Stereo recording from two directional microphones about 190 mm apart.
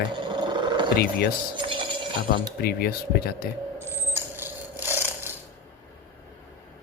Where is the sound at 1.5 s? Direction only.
25° right (ahead or behind).